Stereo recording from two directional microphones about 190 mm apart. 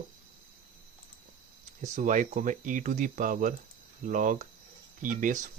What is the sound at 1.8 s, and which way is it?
Speech, 40° right (ahead or behind).